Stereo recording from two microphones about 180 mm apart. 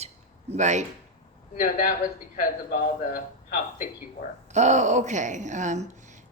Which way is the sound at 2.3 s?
55° left (ahead or behind).